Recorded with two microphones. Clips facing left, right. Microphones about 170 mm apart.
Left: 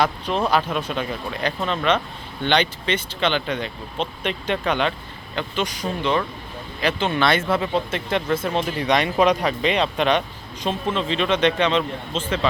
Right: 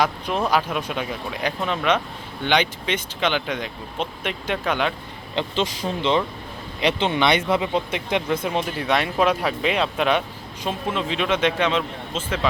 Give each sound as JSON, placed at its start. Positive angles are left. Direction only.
{"t": 0.0, "sound": "speech", "side_deg": -10}
{"t": 5.3, "sound": "speech", "side_deg": -25}